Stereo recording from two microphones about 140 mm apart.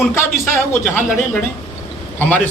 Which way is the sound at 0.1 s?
20° left (ahead or behind).